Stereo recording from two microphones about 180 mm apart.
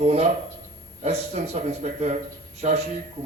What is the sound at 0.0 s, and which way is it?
A man's voice, 35° right (ahead or behind).